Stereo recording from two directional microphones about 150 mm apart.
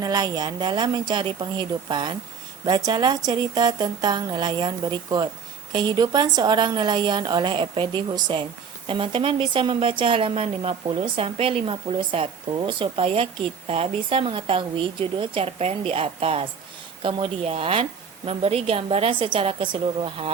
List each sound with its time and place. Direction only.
0.0 s a woman's voice: 25° right (ahead or behind)